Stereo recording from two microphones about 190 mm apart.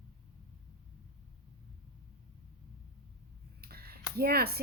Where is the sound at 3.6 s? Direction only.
55° right (ahead or behind).